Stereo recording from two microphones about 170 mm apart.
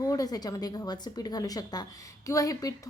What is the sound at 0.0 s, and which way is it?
Speech, 20° left (ahead or behind).